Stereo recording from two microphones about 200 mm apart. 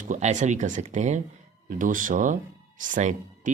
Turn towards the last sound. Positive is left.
turn(degrees=-40)  # may be behind; listen again after turning